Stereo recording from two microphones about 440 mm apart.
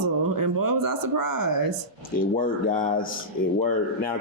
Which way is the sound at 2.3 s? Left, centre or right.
Centre.